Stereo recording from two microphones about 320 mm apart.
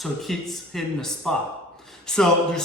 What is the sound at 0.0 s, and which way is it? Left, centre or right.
A man's voice, centre.